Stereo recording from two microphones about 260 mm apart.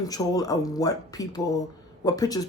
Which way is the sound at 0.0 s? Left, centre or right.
Centre.